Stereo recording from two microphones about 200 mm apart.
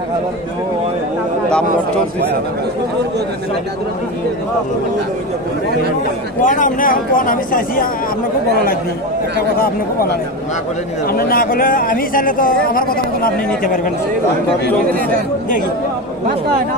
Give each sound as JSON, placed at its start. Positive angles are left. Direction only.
{"t": 6.4, "sound": "speech", "side_deg": 40}
{"t": 11.1, "sound": "speech", "side_deg": 50}